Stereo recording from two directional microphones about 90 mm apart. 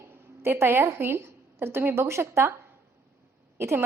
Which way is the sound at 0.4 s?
25° right (ahead or behind).